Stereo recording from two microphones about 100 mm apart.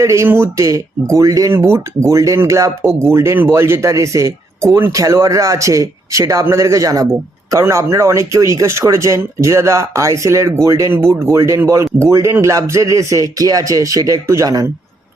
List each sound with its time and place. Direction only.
0.0 s speech: 30° right (ahead or behind)